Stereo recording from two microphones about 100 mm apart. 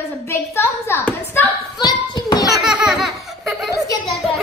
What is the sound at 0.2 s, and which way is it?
Speech, 25° left (ahead or behind).